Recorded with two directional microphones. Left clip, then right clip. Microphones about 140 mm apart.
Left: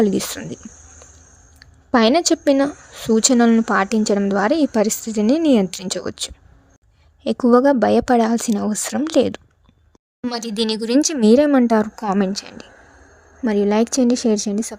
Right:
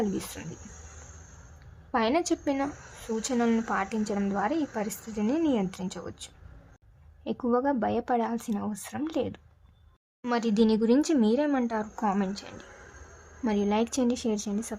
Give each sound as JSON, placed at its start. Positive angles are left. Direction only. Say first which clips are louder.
{"t": 0.0, "sound": "a woman's voice", "louder": "left 13 dB", "side_deg": 50}
{"t": 1.9, "sound": "a woman's voice", "louder": "left 11 dB", "side_deg": 50}
{"t": 10.3, "sound": "a woman's voice", "louder": "left 3 dB", "side_deg": 65}
{"t": 13.4, "sound": "a woman's voice", "louder": "left 10 dB", "side_deg": 35}